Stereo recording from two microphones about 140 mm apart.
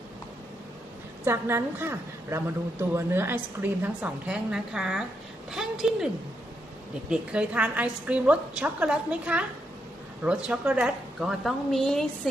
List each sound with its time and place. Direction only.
1.2 s a woman's voice: 15° right (ahead or behind)
7.1 s a woman's voice: 10° right (ahead or behind)